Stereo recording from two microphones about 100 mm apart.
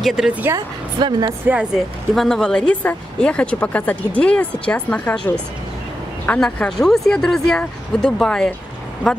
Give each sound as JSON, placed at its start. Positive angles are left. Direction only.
{"t": 0.0, "sound": "speech", "side_deg": -5}
{"t": 0.9, "sound": "speech", "side_deg": -50}
{"t": 1.4, "sound": "speech", "side_deg": -10}
{"t": 2.1, "sound": "speech", "side_deg": 5}